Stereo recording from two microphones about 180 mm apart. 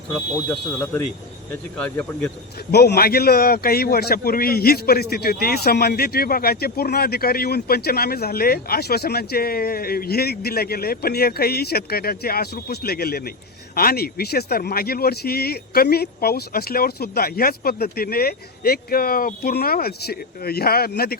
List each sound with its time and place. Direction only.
1.8 s speech: 10° left (ahead or behind)
2.7 s a man's voice: 65° left (ahead or behind)